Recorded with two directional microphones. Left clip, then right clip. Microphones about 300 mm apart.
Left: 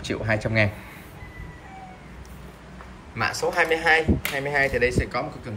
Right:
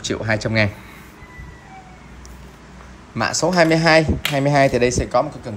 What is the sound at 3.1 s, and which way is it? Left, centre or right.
Speech, centre.